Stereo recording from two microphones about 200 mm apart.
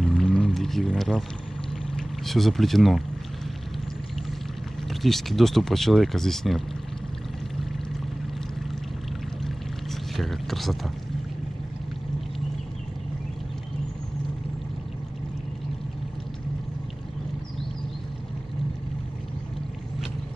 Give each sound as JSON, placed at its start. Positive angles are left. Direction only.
{"t": 0.0, "sound": "pour", "side_deg": 5}
{"t": 4.8, "sound": "speech", "side_deg": 0}
{"t": 9.4, "sound": "boat", "side_deg": 0}